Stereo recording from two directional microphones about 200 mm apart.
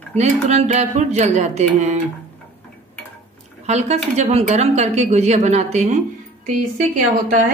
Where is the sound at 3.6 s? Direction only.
35° right (ahead or behind).